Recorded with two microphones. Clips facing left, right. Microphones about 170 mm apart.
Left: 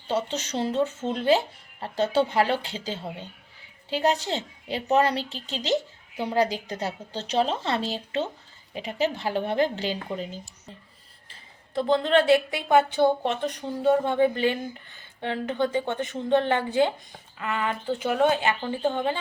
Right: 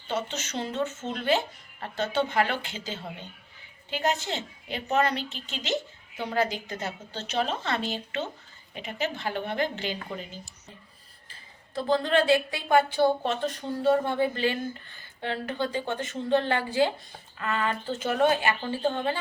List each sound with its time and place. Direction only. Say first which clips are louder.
0.1 s a woman's voice: left 4 dB; 30° left (ahead or behind)
11.3 s speech: left 2 dB; 20° left (ahead or behind)